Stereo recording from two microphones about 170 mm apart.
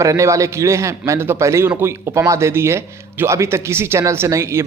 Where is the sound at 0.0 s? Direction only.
20° right (ahead or behind).